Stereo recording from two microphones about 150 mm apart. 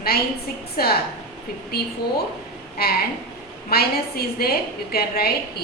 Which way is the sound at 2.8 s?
90° left.